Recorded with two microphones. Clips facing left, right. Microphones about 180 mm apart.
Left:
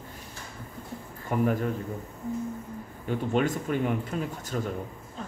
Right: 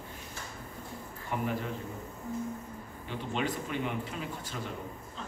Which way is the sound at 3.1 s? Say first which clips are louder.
Left 8 dB; 45° left (ahead or behind).